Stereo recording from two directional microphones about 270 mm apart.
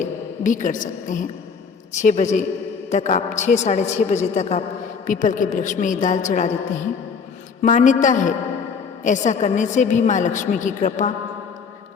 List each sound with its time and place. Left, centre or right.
0.0 s a woman's voice: left
7.6 s a woman's voice: left